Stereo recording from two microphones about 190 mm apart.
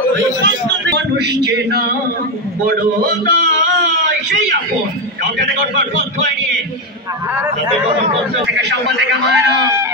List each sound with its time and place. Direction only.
0.8 s speech: 60° right (ahead or behind)
2.6 s a man's voice: 50° right (ahead or behind)
5.8 s a man's voice: 35° right (ahead or behind)
8.5 s a man's voice: 65° right (ahead or behind)